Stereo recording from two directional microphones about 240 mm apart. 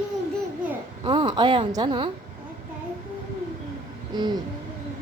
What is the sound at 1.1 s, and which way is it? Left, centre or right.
A woman's voice, centre.